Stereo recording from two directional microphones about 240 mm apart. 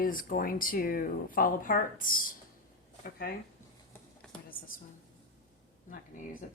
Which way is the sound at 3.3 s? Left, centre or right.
Left.